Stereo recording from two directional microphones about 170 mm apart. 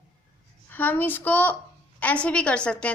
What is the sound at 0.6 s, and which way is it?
A woman's voice, 10° left (ahead or behind).